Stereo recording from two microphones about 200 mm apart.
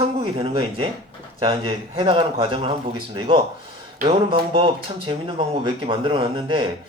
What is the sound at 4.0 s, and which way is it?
Speech, 40° right (ahead or behind).